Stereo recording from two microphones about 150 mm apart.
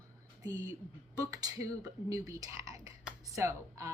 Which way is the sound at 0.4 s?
20° right (ahead or behind).